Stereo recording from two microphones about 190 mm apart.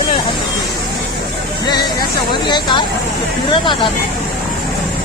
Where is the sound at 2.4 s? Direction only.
25° left (ahead or behind).